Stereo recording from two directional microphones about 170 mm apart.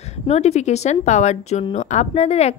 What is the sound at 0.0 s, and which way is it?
Speech, 40° left (ahead or behind).